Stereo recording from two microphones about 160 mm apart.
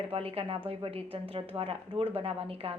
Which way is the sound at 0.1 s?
35° right (ahead or behind).